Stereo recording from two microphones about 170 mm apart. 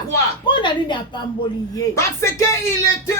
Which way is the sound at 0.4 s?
30° left (ahead or behind).